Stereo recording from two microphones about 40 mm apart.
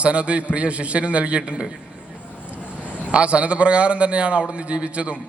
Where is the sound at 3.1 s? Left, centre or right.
Right.